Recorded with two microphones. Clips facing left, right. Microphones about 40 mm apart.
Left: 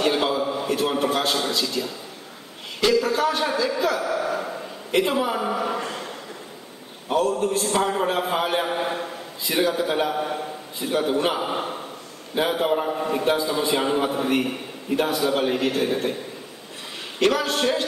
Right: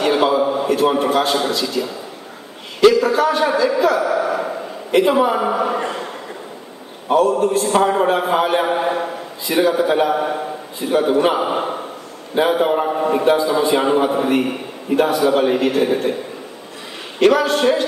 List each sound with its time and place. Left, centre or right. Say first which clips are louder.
0.0 s a sound: right 6 dB; centre
0.9 s a man's voice: right 6 dB; centre
4.0 s a man's voice: right 6 dB; right
4.9 s a man's voice: right 7 dB; centre
5.4 s speech: right 6 dB; right
7.1 s a man's voice: right 7 dB; centre; by 9.1 s right
9.5 s a man's voice: right 6 dB; centre
17.2 s a man's voice: right 7 dB; centre